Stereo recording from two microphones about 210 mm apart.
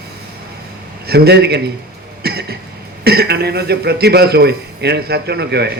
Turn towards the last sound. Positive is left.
turn(degrees=-50)  # may be behind; listen again after turning